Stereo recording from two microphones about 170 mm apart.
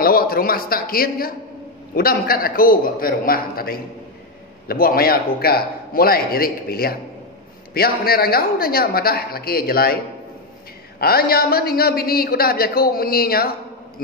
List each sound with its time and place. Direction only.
0.0 s a man's voice: 60° left (ahead or behind)
11.0 s a man's voice: 65° left (ahead or behind)